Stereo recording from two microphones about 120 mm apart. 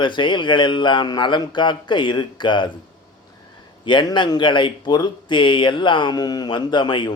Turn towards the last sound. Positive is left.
turn(degrees=40)  # may be behind; listen again after turning